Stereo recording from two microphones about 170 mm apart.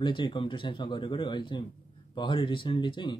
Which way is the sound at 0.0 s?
30° left (ahead or behind).